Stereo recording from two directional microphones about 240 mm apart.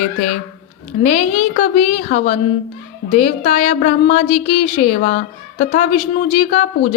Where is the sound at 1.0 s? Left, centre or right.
Left.